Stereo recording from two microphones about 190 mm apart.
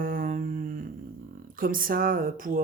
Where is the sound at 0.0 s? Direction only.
45° right (ahead or behind).